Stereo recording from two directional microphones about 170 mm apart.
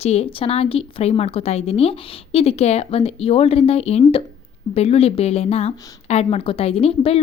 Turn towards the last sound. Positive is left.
turn(degrees=35)  # may be behind; listen again after turning